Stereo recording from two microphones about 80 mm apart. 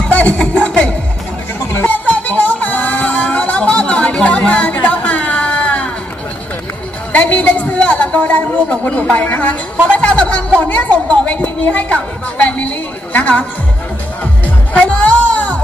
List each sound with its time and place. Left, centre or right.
0.1 s music: centre
7.1 s a man's voice: centre
14.2 s music: centre